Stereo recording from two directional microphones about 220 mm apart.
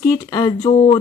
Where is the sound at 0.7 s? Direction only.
30° left (ahead or behind).